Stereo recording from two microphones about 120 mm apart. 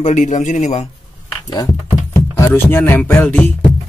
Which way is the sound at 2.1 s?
25° left (ahead or behind).